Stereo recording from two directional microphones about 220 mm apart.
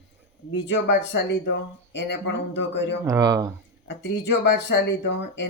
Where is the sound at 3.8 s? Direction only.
50° left (ahead or behind).